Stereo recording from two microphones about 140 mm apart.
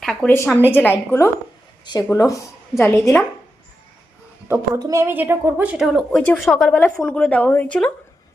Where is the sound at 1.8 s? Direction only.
30° left (ahead or behind).